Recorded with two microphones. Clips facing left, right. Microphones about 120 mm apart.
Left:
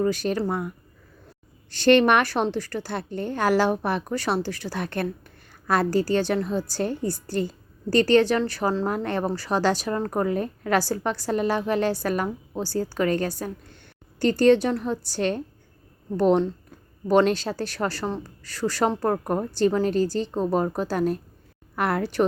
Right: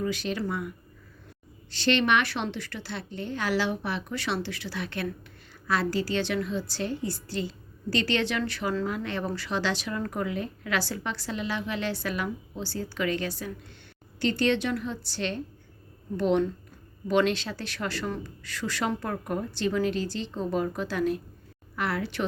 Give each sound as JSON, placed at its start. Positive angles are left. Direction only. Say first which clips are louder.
{"t": 0.0, "sound": "a woman's voice", "louder": "left 6 dB", "side_deg": 45}
{"t": 1.7, "sound": "a woman's voice", "louder": "left 7 dB", "side_deg": 50}
{"t": 9.0, "sound": "a woman's voice", "louder": "left 6 dB", "side_deg": 45}